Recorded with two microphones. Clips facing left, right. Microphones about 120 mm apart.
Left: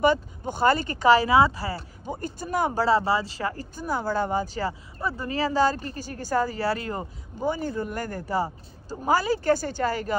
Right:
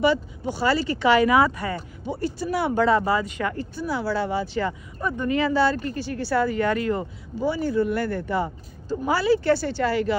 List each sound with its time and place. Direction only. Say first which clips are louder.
0.0 s speech: right 1 dB; 50° left (ahead or behind); by 1.8 s 30° left (ahead or behind)
2.0 s speech: right 5 dB; 45° left (ahead or behind)
7.4 s a woman's voice: right 5 dB; 45° left (ahead or behind)